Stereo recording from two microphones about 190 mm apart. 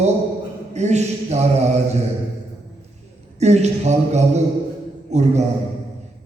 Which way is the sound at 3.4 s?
35° right (ahead or behind).